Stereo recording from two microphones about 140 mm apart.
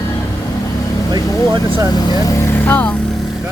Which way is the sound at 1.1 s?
30° right (ahead or behind).